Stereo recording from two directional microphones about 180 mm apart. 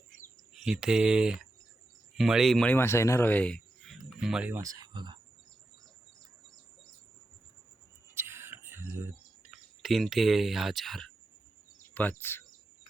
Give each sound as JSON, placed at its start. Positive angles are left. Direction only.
{"t": 0.5, "sound": "speech", "side_deg": -5}
{"t": 4.5, "sound": "speech", "side_deg": -20}
{"t": 8.1, "sound": "a sound", "side_deg": -15}
{"t": 9.8, "sound": "speech", "side_deg": 0}